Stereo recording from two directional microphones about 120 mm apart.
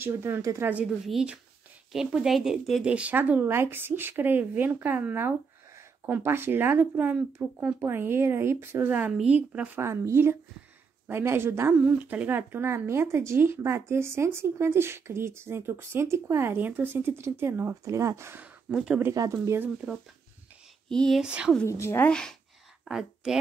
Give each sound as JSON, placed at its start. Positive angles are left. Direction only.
{"t": 0.0, "sound": "speech", "side_deg": -20}
{"t": 0.7, "sound": "speech", "side_deg": -10}
{"t": 19.0, "sound": "speech", "side_deg": -25}
{"t": 20.9, "sound": "speech", "side_deg": 5}
{"t": 21.2, "sound": "speech", "side_deg": -5}
{"t": 21.6, "sound": "a woman's voice", "side_deg": 25}
{"t": 22.1, "sound": "speech", "side_deg": 5}